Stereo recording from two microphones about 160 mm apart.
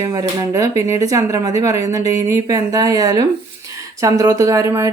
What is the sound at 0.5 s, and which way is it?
Speech, 20° right (ahead or behind).